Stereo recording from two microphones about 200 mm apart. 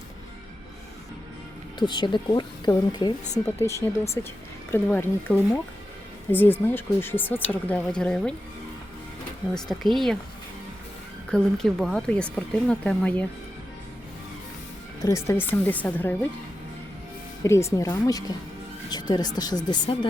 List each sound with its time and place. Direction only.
1.8 s speech: 20° left (ahead or behind); by 8.4 s 5° left (ahead or behind)
9.6 s speech: centre (ahead or behind)
11.3 s speech: 5° left (ahead or behind)
15.0 s speech: 15° left (ahead or behind)
17.4 s speech: 15° left (ahead or behind)